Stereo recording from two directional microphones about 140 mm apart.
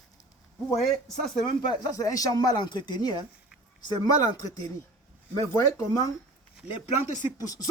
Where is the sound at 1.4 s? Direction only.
30° left (ahead or behind).